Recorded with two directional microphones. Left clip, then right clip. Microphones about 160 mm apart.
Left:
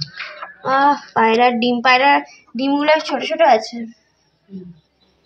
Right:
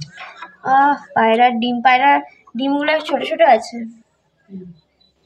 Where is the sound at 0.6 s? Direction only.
10° right (ahead or behind).